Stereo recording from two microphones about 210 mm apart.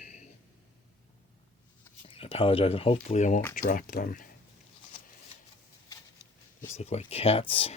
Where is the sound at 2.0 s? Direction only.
25° left (ahead or behind); by 4.3 s 40° left (ahead or behind).